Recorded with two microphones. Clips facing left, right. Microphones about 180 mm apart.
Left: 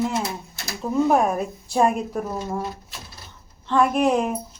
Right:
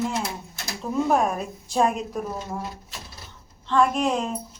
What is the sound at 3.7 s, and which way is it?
Speech, 10° left (ahead or behind).